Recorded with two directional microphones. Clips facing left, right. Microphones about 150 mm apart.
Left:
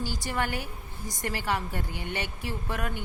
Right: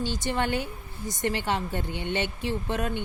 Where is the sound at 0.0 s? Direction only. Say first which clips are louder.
Right 3 dB; 25° right (ahead or behind).